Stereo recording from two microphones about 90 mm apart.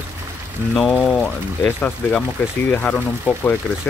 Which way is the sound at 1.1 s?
20° left (ahead or behind).